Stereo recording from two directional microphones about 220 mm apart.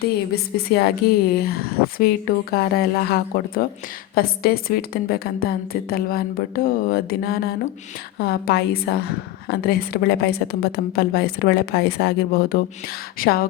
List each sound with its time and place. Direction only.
0.3 s a woman's voice: 45° left (ahead or behind)